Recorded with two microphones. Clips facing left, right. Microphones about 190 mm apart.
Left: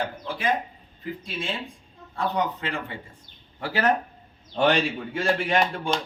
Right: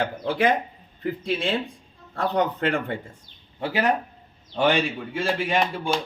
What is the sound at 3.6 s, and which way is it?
Speech, 15° right (ahead or behind).